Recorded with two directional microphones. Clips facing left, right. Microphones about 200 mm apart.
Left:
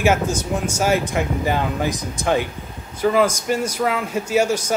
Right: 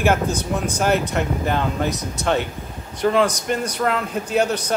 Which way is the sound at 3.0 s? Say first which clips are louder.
Left 1 dB; 5° left (ahead or behind).